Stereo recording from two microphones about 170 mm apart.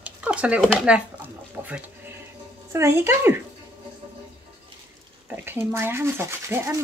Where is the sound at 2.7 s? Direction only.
15° right (ahead or behind).